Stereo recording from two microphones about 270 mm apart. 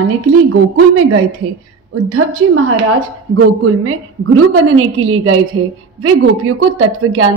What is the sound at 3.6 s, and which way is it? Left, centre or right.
A woman's voice, right.